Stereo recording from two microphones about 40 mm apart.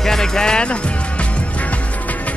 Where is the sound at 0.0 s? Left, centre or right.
Centre.